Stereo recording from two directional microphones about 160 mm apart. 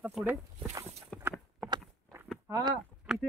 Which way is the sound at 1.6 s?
Centre (ahead or behind).